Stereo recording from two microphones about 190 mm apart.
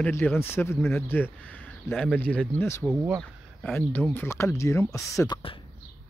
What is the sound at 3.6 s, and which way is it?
Speech, 5° left (ahead or behind).